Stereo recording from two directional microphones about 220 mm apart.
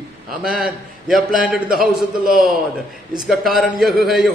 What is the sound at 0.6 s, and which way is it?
A man's voice, centre (ahead or behind).